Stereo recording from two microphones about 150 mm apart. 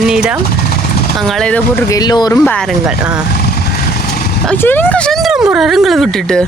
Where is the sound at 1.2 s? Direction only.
5° left (ahead or behind).